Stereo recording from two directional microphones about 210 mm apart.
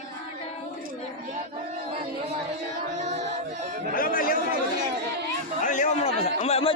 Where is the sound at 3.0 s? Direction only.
35° right (ahead or behind).